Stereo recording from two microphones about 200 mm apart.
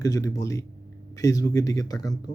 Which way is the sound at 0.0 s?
15° left (ahead or behind).